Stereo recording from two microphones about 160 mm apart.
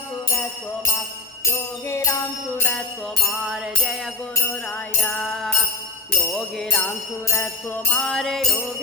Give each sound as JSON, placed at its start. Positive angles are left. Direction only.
{"t": 1.5, "sound": "jingle bell", "side_deg": 15}
{"t": 3.4, "sound": "jingle bell", "side_deg": 0}
{"t": 4.9, "sound": "jingle bell", "side_deg": 5}